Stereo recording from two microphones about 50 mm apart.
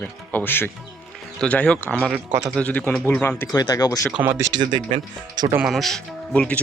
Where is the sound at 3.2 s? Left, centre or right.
Left.